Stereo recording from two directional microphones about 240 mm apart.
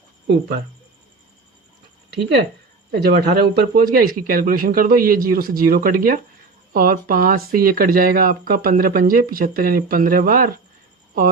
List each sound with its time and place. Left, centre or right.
2.9 s speech: right